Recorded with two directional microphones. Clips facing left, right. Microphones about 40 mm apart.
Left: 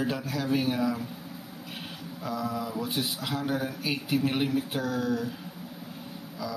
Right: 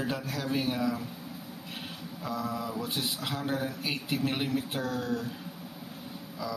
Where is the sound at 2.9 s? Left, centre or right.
Centre.